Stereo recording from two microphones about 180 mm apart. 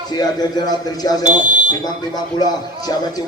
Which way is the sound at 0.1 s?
20° left (ahead or behind).